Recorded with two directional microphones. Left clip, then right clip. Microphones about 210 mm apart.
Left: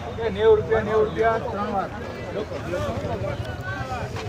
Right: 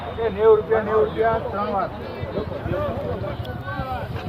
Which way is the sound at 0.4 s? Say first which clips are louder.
Right 2 dB; 30° left (ahead or behind).